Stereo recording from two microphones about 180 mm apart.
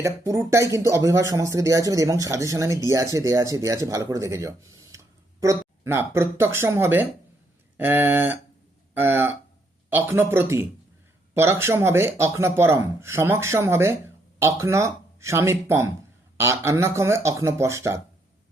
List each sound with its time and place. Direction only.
0.0 s speech: 15° right (ahead or behind)